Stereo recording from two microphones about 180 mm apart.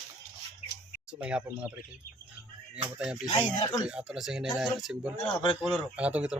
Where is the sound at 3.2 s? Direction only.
20° left (ahead or behind).